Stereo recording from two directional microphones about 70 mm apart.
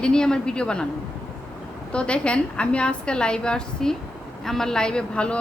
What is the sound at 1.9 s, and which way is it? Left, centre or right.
A woman's voice, centre.